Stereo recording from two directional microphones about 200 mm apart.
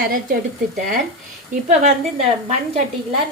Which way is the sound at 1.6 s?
35° right (ahead or behind).